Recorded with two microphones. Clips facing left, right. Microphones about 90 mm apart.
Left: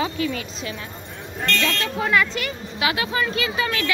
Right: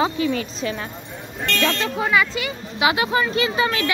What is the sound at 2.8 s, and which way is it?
Speech, 25° right (ahead or behind).